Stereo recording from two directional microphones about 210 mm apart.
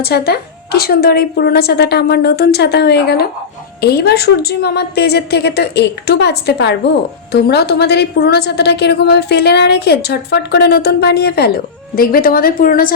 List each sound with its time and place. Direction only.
0.0 s a woman's voice: 50° left (ahead or behind)